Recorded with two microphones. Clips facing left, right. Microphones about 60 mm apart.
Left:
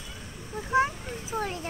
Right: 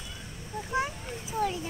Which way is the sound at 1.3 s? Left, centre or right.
Left.